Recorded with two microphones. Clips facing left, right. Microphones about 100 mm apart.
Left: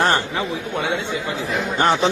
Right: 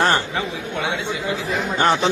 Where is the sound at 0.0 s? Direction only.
25° left (ahead or behind).